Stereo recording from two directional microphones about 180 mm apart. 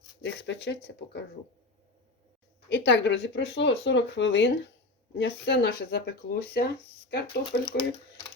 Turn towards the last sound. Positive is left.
turn(degrees=65)  # may be behind; listen again after turning